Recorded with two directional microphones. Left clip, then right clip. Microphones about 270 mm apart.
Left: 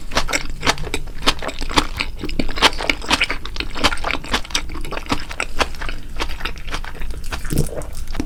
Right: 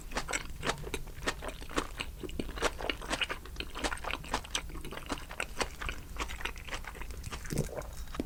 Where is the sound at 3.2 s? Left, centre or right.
Centre.